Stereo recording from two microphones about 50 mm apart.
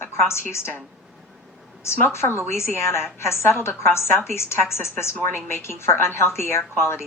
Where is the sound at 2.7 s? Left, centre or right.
Left.